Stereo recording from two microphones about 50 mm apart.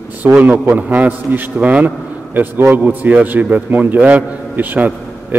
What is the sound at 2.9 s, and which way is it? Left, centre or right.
A man's voice, right.